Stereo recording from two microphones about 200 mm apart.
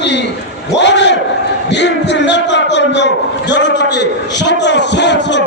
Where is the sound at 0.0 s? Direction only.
60° left (ahead or behind).